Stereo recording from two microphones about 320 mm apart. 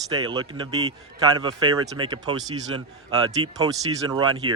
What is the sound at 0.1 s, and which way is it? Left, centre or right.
Speech, centre.